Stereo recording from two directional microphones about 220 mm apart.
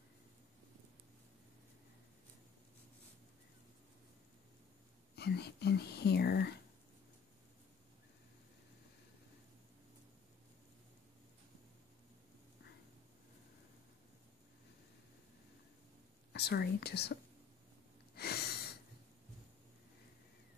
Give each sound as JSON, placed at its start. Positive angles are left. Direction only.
{"t": 5.1, "sound": "speech", "side_deg": 50}
{"t": 16.3, "sound": "speech", "side_deg": 45}
{"t": 18.1, "sound": "a sound", "side_deg": 45}